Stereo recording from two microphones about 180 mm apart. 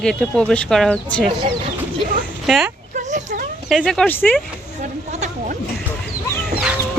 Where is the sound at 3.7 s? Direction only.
Centre (ahead or behind).